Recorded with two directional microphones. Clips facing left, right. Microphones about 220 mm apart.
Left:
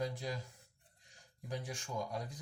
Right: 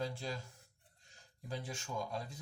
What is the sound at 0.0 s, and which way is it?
Speech, 15° left (ahead or behind).